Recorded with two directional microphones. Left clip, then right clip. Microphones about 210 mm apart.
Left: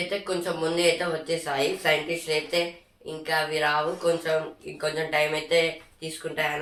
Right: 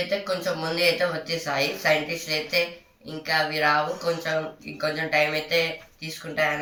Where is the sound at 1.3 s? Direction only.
Centre (ahead or behind).